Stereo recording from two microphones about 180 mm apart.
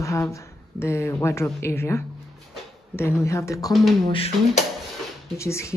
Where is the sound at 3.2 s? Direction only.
15° left (ahead or behind).